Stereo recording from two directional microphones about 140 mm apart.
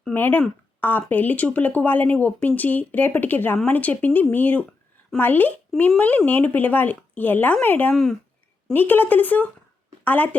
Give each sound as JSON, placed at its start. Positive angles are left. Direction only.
{"t": 0.0, "sound": "a woman's voice", "side_deg": 15}